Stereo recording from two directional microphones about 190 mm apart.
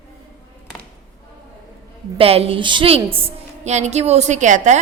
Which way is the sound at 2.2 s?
30° right (ahead or behind).